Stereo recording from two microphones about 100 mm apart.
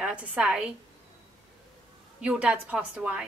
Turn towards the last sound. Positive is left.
turn(degrees=-10)  # may be behind; listen again after turning